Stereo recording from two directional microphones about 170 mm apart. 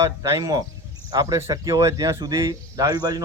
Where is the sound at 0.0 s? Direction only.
20° right (ahead or behind).